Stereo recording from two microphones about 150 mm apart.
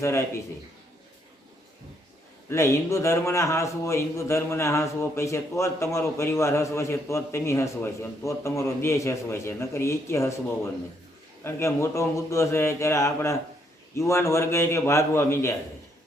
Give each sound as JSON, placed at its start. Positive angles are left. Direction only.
{"t": 0.0, "sound": "a man's voice", "side_deg": 20}
{"t": 2.5, "sound": "a man's voice", "side_deg": 20}